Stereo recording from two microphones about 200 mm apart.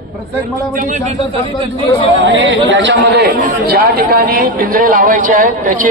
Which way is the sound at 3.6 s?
50° right (ahead or behind).